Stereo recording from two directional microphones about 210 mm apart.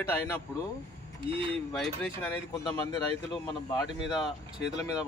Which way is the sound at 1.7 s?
5° left (ahead or behind).